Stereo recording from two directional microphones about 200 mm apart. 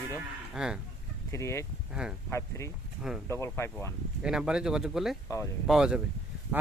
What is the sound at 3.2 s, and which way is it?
Speech, 15° left (ahead or behind).